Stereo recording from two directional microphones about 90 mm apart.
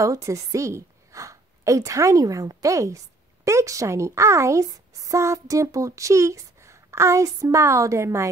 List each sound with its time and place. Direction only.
0.0 s a woman's voice: 35° right (ahead or behind)